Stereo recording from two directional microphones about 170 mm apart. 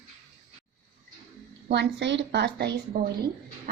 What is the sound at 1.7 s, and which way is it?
A woman's voice, 90° right.